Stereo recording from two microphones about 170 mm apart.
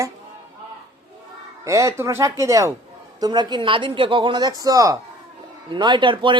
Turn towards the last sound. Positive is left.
turn(degrees=-30)  # may be behind; listen again after turning